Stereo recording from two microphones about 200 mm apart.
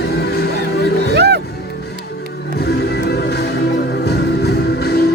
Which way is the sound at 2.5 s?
55° left (ahead or behind).